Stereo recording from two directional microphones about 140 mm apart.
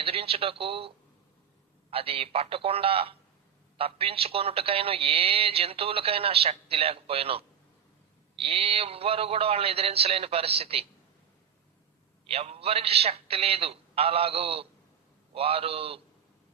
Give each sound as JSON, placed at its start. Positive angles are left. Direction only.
{"t": 0.0, "sound": "speech", "side_deg": -45}
{"t": 12.3, "sound": "speech", "side_deg": -45}